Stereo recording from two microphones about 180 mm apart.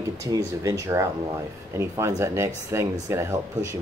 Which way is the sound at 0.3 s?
20° right (ahead or behind).